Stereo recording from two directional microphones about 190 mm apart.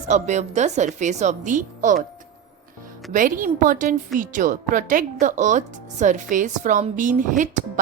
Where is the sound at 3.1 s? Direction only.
45° right (ahead or behind).